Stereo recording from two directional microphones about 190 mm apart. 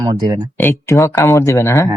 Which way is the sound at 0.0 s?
15° right (ahead or behind).